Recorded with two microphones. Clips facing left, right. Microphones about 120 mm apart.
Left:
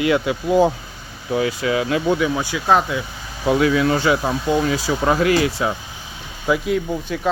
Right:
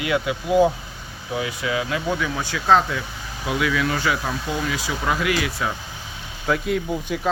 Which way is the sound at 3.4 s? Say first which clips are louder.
Left 6 dB; 35° left (ahead or behind).